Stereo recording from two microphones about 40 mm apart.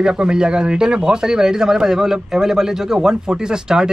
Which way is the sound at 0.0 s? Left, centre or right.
Right.